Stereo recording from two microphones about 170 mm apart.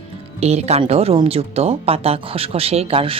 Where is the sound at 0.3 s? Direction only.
40° right (ahead or behind).